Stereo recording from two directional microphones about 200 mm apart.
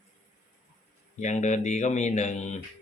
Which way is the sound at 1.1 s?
35° left (ahead or behind).